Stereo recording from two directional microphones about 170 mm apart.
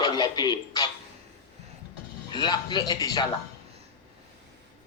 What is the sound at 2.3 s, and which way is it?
Speech, 25° left (ahead or behind).